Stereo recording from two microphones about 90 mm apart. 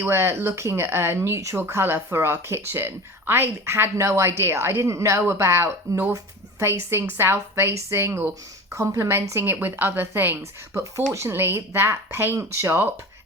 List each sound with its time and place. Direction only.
0.0 s speech: 30° right (ahead or behind)